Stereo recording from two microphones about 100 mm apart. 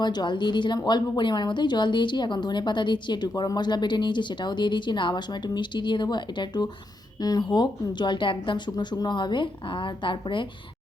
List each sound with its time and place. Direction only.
0.0 s a woman's voice: 45° left (ahead or behind)